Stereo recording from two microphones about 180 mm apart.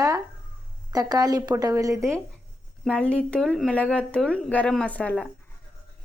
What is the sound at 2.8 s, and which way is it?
A woman's voice, 5° left (ahead or behind).